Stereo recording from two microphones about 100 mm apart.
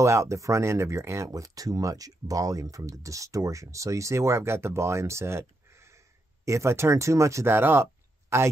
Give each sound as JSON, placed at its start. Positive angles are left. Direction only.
{"t": 0.0, "sound": "speech", "side_deg": -30}